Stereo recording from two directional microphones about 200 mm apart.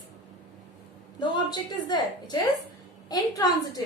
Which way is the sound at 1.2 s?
20° left (ahead or behind).